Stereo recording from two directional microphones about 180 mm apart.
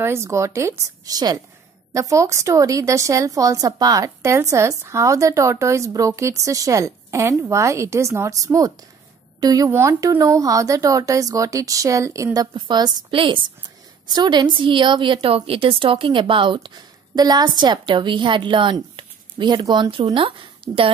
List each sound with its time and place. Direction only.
0.0 s a woman's voice: 15° right (ahead or behind); by 20.9 s 30° right (ahead or behind)